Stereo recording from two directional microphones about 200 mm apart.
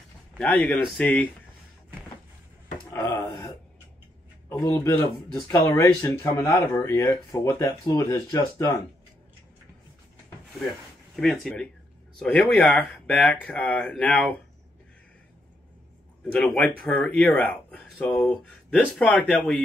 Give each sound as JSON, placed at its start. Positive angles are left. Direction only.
{"t": 0.4, "sound": "speech", "side_deg": 10}
{"t": 2.9, "sound": "wail", "side_deg": 15}
{"t": 4.5, "sound": "speech", "side_deg": 15}
{"t": 11.1, "sound": "speech", "side_deg": 0}
{"t": 16.3, "sound": "speech", "side_deg": 5}